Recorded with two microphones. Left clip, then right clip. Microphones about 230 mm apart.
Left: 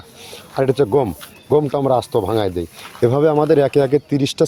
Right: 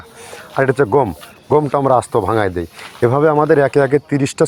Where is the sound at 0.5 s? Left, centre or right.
Centre.